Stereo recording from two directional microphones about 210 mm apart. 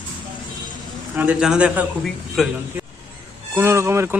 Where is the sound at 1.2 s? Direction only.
5° right (ahead or behind).